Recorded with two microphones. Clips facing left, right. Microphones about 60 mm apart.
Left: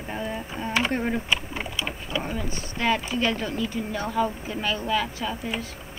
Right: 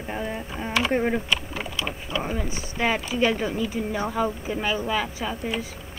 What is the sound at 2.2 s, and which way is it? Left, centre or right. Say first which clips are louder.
A woman's voice: right 2 dB; centre.